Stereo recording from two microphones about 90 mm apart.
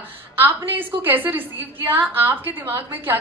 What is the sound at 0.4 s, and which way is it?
A woman's voice, 20° right (ahead or behind).